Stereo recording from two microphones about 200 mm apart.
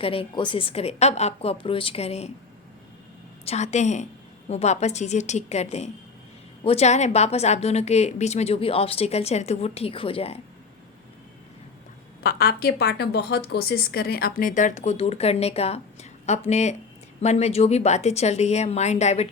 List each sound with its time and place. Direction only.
0.0 s a woman's voice: 30° left (ahead or behind)
3.4 s a woman's voice: 35° left (ahead or behind)
12.2 s a woman's voice: 50° left (ahead or behind); by 19.3 s 35° left (ahead or behind)